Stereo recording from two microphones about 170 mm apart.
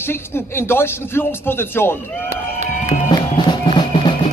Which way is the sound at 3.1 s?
25° left (ahead or behind).